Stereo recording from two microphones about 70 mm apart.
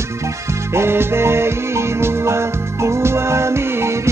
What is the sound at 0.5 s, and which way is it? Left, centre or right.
Music, right.